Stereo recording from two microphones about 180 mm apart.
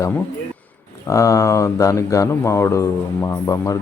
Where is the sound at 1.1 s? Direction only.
15° left (ahead or behind).